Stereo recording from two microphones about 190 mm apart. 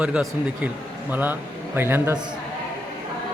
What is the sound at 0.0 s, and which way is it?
A man's voice, 5° right (ahead or behind).